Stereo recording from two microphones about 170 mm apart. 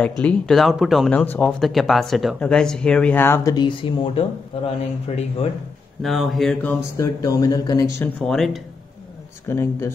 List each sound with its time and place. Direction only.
0.2 s speech: 5° left (ahead or behind)
3.5 s speech: 25° left (ahead or behind)
6.0 s speech: centre (ahead or behind)
7.0 s speech: 20° left (ahead or behind)
8.0 s speech: 5° left (ahead or behind)
9.5 s speech: 15° left (ahead or behind)